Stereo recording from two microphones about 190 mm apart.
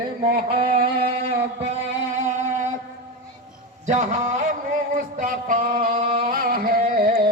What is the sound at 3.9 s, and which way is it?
Music, 40° right (ahead or behind).